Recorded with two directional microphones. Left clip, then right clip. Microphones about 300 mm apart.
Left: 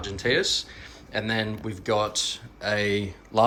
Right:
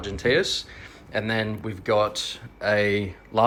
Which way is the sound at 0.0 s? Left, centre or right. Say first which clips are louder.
Right 2 dB; centre.